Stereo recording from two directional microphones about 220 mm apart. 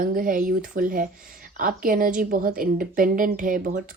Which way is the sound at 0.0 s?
40° right (ahead or behind).